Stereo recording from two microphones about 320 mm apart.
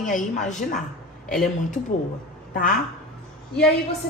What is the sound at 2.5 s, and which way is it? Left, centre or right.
Speech, left.